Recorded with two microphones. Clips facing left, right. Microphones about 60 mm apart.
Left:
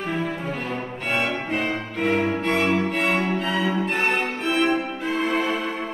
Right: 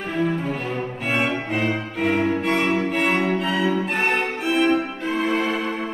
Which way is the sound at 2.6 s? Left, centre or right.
Centre.